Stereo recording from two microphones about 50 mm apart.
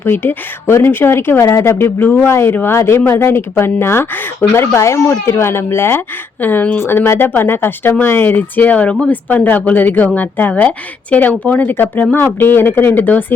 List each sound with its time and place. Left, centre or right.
0.0 s speech: left
5.2 s speech: left
6.4 s speech: left
6.7 s speech: left
9.3 s speech: left
12.1 s speech: left